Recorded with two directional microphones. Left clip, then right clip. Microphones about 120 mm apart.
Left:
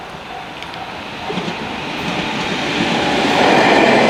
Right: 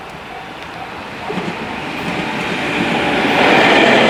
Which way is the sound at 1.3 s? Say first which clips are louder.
Even; 45° left (ahead or behind).